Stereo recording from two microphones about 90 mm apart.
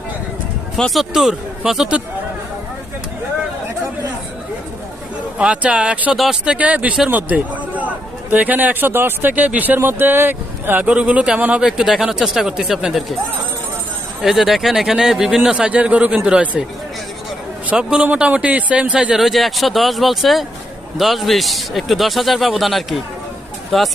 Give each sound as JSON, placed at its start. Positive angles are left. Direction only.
{"t": 0.8, "sound": "a man's voice", "side_deg": 0}
{"t": 5.4, "sound": "speech", "side_deg": -10}
{"t": 7.1, "sound": "a sound", "side_deg": -20}
{"t": 8.3, "sound": "speech", "side_deg": -20}
{"t": 14.2, "sound": "a man's voice", "side_deg": -5}
{"t": 17.7, "sound": "a man's voice", "side_deg": -10}